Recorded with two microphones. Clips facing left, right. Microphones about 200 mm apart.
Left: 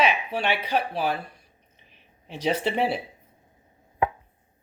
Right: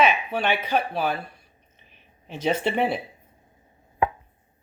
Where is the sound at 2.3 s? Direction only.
25° right (ahead or behind).